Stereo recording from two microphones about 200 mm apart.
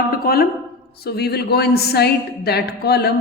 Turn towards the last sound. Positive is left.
turn(degrees=55)  # may be behind; listen again after turning